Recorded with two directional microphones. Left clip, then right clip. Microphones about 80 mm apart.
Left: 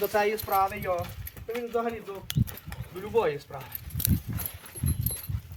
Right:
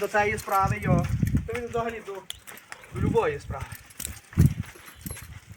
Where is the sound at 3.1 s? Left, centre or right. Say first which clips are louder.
Right 1 dB; centre.